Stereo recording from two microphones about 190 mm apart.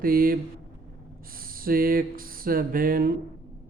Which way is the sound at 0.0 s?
50° right (ahead or behind).